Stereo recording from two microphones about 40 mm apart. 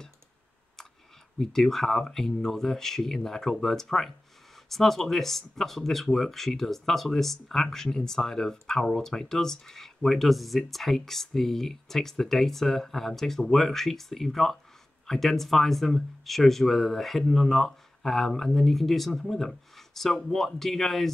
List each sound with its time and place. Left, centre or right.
1.4 s speech: centre